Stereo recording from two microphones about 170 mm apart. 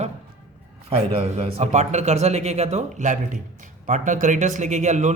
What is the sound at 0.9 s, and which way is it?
A man's voice, 35° right (ahead or behind).